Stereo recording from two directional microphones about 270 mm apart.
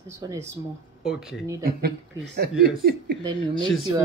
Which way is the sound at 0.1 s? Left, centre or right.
Centre.